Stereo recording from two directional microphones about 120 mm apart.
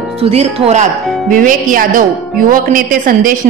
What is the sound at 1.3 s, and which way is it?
Speech, 90° right.